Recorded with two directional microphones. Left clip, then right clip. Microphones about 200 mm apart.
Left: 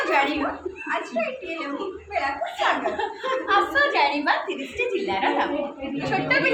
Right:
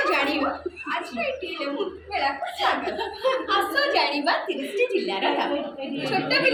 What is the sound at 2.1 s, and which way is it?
A woman's voice, 15° left (ahead or behind).